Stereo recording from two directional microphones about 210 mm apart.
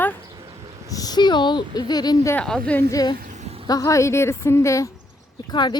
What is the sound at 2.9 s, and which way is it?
Speech, 15° left (ahead or behind).